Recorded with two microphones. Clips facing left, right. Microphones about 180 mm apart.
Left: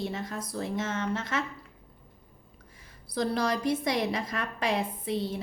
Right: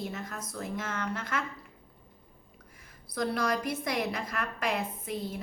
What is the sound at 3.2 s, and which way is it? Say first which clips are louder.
A woman's voice: left 2 dB; 30° left (ahead or behind).